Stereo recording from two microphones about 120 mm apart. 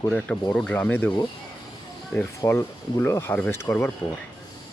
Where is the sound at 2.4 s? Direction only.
25° left (ahead or behind).